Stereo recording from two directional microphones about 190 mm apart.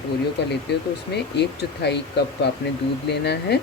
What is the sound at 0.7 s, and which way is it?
Speech, 60° left (ahead or behind).